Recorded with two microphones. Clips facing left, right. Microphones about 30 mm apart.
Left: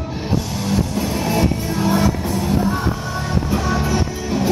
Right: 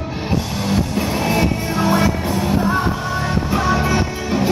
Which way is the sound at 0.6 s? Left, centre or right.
Right.